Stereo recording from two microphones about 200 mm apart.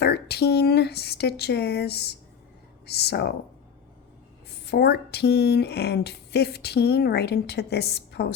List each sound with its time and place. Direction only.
0.0 s speech: 55° left (ahead or behind)
4.6 s speech: 55° left (ahead or behind)